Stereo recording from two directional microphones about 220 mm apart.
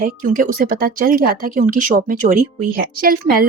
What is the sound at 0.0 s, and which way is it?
Speech, 40° right (ahead or behind).